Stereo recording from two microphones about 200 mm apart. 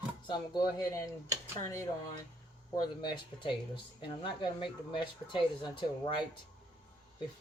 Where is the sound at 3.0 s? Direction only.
25° left (ahead or behind).